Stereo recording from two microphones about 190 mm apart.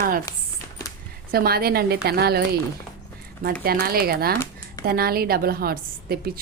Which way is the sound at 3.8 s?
50° right (ahead or behind).